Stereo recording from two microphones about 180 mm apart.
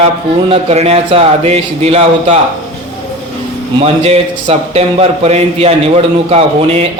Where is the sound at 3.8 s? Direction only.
35° right (ahead or behind).